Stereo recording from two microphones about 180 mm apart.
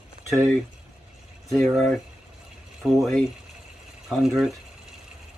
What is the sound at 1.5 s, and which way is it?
Speech, centre (ahead or behind).